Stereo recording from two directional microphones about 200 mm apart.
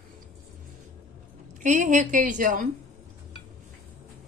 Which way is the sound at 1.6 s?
40° right (ahead or behind).